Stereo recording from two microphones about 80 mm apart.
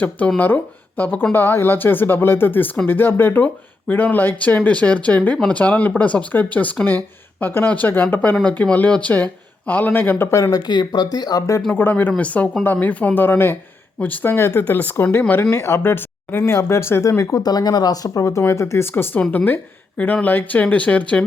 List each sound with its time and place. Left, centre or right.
0.3 s speech: left
10.5 s speech: left
11.7 s speech: left
17.4 s speech: left
20.2 s speech: left